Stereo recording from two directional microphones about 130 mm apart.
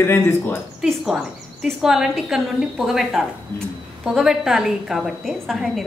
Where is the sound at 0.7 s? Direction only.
5° right (ahead or behind).